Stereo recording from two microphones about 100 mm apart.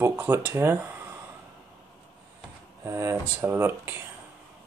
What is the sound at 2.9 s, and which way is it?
Speech, 30° right (ahead or behind).